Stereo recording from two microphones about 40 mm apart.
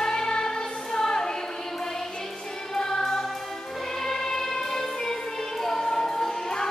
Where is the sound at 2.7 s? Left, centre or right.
Centre.